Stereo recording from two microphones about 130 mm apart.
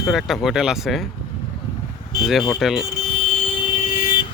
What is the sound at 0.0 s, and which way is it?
Speech, centre (ahead or behind).